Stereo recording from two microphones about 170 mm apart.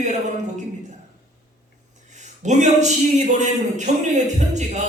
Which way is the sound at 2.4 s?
45° right (ahead or behind).